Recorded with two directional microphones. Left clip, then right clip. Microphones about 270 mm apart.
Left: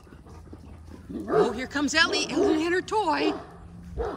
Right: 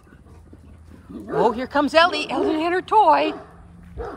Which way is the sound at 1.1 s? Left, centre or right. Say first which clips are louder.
Left 2 dB; left.